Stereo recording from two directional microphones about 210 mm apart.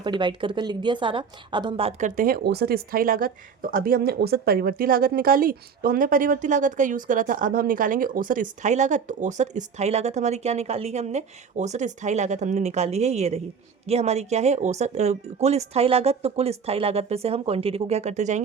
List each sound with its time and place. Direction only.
0.0 s a woman's voice: 20° right (ahead or behind)